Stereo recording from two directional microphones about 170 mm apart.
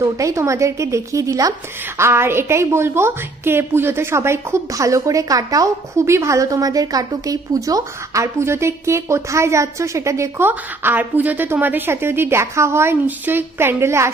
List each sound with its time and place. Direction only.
0.0 s a woman's voice: 20° right (ahead or behind)